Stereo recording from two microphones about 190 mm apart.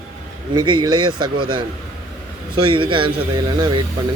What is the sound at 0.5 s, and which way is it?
Speech, 25° right (ahead or behind).